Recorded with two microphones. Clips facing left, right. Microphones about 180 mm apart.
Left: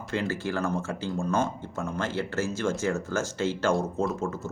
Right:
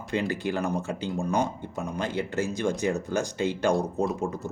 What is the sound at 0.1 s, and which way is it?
Speech, 15° right (ahead or behind).